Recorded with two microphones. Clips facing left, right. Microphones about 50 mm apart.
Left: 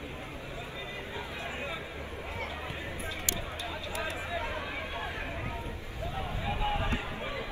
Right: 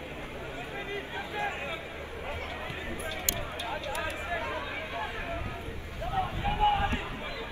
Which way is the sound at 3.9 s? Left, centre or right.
Right.